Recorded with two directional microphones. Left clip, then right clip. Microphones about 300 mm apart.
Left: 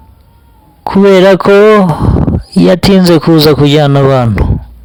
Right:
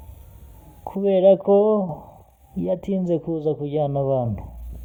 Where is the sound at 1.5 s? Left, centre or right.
Left.